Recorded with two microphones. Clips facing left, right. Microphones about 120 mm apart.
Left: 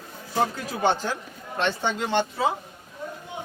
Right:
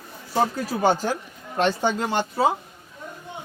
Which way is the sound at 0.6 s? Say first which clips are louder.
Right 3 dB; 40° right (ahead or behind).